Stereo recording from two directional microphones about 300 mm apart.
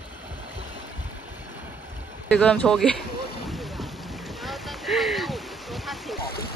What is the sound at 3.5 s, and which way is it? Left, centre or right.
Boat, centre.